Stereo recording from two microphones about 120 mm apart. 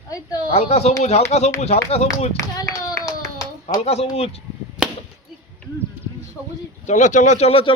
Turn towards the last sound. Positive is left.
turn(degrees=50)  # may be behind; listen again after turning